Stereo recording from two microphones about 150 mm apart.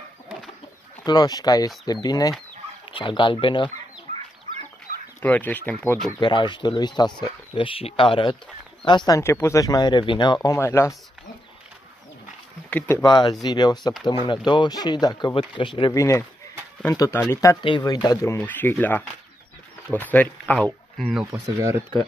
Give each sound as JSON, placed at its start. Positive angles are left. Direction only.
{"t": 1.0, "sound": "speech", "side_deg": 25}
{"t": 4.1, "sound": "chicken", "side_deg": -55}
{"t": 5.2, "sound": "speech", "side_deg": 10}
{"t": 6.1, "sound": "speech", "side_deg": 30}
{"t": 12.6, "sound": "speech", "side_deg": 15}
{"t": 13.0, "sound": "speech", "side_deg": 30}
{"t": 16.0, "sound": "speech", "side_deg": 20}
{"t": 17.6, "sound": "speech", "side_deg": 30}
{"t": 21.3, "sound": "speech", "side_deg": -20}